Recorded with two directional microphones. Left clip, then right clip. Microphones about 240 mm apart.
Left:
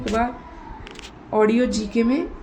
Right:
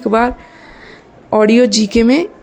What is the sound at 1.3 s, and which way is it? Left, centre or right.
Speech, right.